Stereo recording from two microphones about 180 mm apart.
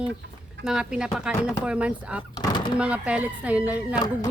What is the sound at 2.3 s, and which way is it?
Door, 20° left (ahead or behind).